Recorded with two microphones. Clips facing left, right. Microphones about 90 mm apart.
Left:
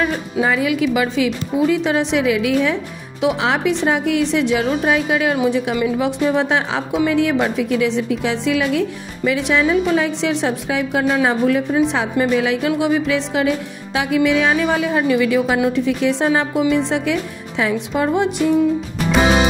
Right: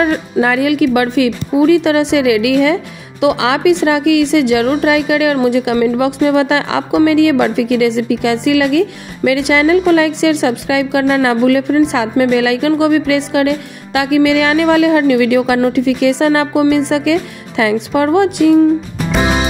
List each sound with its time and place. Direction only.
0.0 s a woman's voice: 65° right (ahead or behind); by 7.0 s 85° right
7.1 s a woman's voice: 70° right (ahead or behind)
18.9 s music: centre (ahead or behind)